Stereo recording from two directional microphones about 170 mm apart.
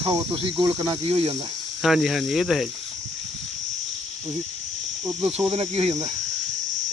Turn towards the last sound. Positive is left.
turn(degrees=-35)  # may be behind; listen again after turning